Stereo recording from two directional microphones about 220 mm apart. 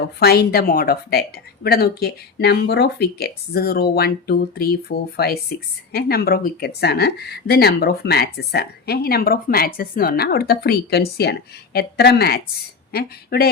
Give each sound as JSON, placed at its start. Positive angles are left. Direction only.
{"t": 0.2, "sound": "speech", "side_deg": 45}